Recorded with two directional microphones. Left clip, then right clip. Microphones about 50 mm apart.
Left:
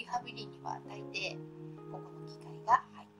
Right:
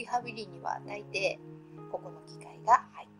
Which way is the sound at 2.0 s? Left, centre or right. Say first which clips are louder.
Right 2 dB; right.